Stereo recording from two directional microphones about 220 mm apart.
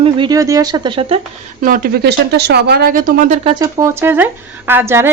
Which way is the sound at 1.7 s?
40° right (ahead or behind).